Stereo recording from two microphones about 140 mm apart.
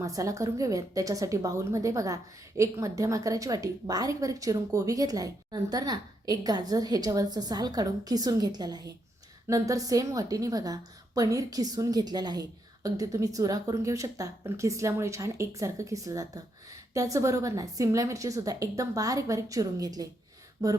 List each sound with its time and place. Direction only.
0.0 s a woman's voice: 25° right (ahead or behind)